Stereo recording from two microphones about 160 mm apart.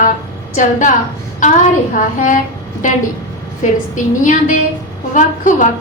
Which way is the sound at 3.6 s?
50° left (ahead or behind).